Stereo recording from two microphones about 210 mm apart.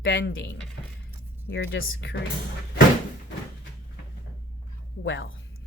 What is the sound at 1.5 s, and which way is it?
Speech, 60° left (ahead or behind).